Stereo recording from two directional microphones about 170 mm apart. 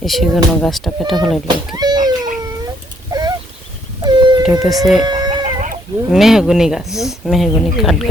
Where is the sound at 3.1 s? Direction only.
25° right (ahead or behind).